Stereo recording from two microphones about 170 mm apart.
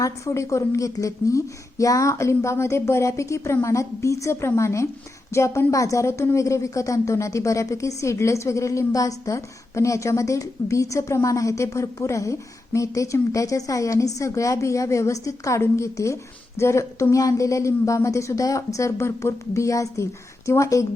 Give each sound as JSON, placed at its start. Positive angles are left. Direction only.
{"t": 0.0, "sound": "speech", "side_deg": 15}